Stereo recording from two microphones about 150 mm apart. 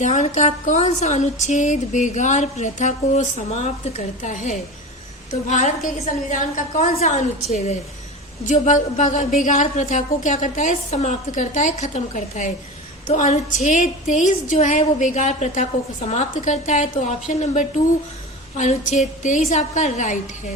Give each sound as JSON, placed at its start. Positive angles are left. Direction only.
{"t": 0.0, "sound": "a woman's voice", "side_deg": 55}